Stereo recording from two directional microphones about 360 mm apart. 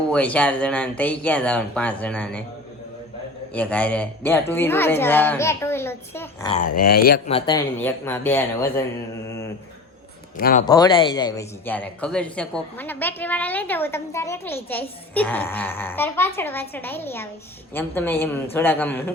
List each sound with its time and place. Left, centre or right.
0.1 s a man's voice: centre
3.5 s a man's voice: centre
6.8 s speech: left; by 8.4 s centre
10.3 s speech: left
10.7 s a man's voice: centre